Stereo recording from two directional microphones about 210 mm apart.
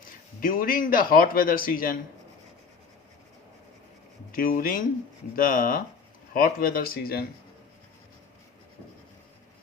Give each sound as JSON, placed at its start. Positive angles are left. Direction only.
{"t": 0.4, "sound": "a man's voice", "side_deg": 40}
{"t": 4.3, "sound": "a man's voice", "side_deg": 40}